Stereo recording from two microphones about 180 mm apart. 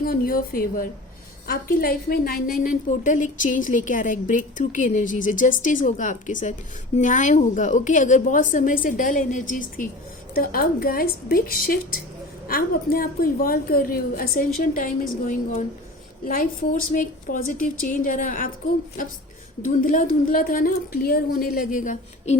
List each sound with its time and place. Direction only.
0.0 s a woman's voice: 55° left (ahead or behind)